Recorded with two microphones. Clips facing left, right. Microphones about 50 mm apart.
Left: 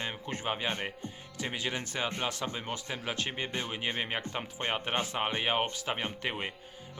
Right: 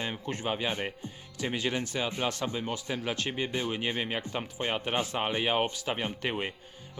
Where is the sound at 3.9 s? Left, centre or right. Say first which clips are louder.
Right 2 dB; left.